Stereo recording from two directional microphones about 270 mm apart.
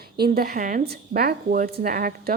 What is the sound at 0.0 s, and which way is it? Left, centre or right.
Speech, right.